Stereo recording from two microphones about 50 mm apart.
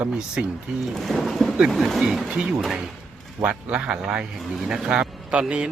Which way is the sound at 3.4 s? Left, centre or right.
Right.